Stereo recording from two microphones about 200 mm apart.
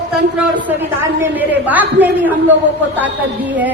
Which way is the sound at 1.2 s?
10° right (ahead or behind).